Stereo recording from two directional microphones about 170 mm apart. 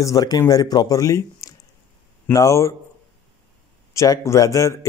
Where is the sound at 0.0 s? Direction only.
20° left (ahead or behind).